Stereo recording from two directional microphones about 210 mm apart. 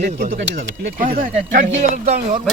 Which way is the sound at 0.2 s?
60° right (ahead or behind).